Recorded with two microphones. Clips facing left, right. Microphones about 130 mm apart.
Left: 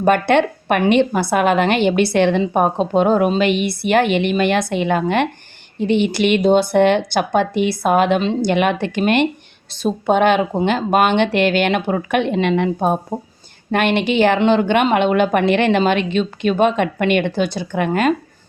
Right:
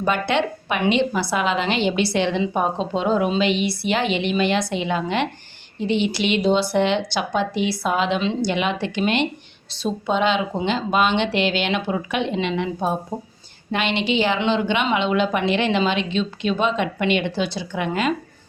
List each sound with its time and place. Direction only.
0.0 s a woman's voice: 50° left (ahead or behind)